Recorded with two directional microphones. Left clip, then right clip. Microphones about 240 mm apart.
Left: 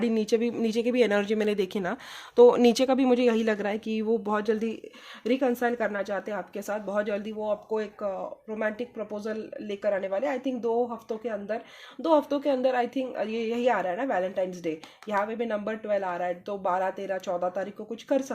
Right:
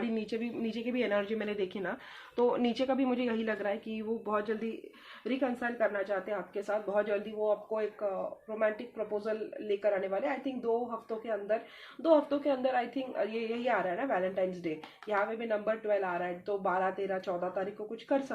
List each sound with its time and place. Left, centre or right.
0.0 s speech: left
9.1 s a woman's voice: left
12.0 s a woman's voice: left